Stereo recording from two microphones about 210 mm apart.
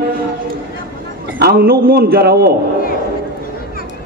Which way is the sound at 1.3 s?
50° right (ahead or behind).